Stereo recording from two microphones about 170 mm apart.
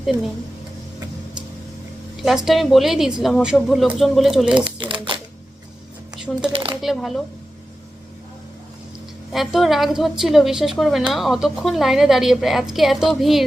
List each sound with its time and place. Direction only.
2.2 s a woman's voice: centre (ahead or behind)
4.6 s a sound: 30° right (ahead or behind)
6.5 s speech: 30° right (ahead or behind)
6.8 s a woman's voice: centre (ahead or behind)
9.3 s a woman's voice: centre (ahead or behind)